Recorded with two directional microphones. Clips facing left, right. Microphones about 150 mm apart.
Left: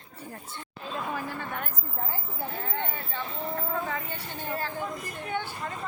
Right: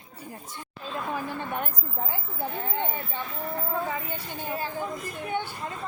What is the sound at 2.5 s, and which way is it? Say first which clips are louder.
Speech: right 3 dB; 20° right (ahead or behind).